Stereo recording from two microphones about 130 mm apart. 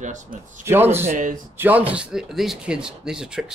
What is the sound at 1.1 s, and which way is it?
Speech, 80° right.